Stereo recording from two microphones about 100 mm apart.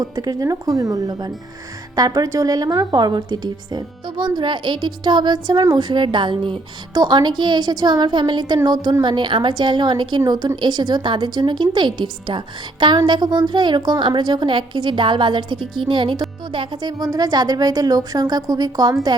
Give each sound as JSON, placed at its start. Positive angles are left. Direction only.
{"t": 0.0, "sound": "a woman's voice", "side_deg": -40}
{"t": 17.0, "sound": "a woman's voice", "side_deg": -40}